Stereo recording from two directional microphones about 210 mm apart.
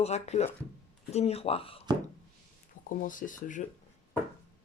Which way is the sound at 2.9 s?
40° left (ahead or behind).